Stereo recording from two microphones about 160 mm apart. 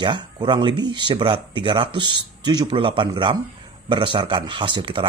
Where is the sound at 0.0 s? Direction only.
30° right (ahead or behind).